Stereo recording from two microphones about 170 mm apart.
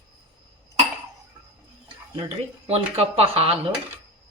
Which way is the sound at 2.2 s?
35° right (ahead or behind).